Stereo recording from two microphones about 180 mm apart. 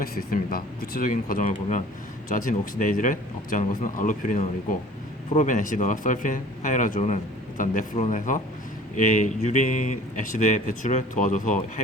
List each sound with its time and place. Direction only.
0.0 s speech: 55° left (ahead or behind)